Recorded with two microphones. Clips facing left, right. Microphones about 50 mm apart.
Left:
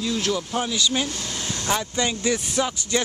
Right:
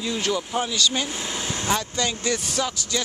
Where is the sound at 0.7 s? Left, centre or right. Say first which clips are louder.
Left 1 dB; centre.